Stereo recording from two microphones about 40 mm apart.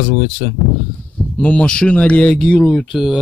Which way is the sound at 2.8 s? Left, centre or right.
Centre.